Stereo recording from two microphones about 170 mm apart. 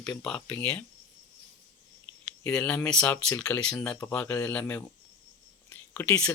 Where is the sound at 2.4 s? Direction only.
5° left (ahead or behind).